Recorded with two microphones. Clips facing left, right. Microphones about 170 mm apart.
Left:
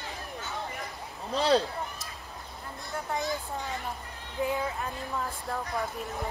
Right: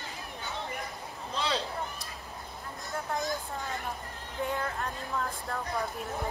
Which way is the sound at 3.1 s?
Centre (ahead or behind).